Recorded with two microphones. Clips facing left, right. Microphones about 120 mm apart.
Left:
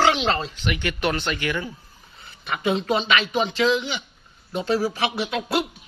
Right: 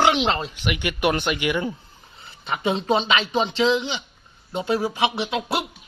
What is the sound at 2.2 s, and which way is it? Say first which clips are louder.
Speech: right 1 dB; 30° right (ahead or behind).